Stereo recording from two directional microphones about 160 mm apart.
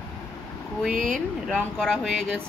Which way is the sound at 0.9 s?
60° right (ahead or behind).